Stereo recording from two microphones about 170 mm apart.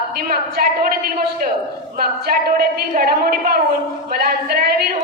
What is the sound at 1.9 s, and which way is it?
A woman's voice, 65° right (ahead or behind).